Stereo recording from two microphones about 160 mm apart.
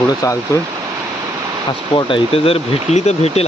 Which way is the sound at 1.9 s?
35° left (ahead or behind).